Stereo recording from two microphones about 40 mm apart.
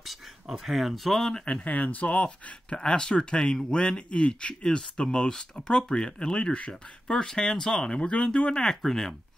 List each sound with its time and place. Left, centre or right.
0.0 s speech: centre
1.4 s speech: left
2.2 s speech: left
8.6 s speech: centre